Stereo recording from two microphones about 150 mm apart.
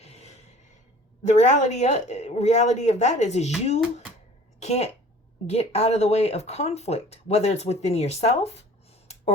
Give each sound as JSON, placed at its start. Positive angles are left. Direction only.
{"t": 0.0, "sound": "gasp", "side_deg": 45}
{"t": 1.2, "sound": "speech", "side_deg": 50}
{"t": 4.6, "sound": "a woman's voice", "side_deg": 45}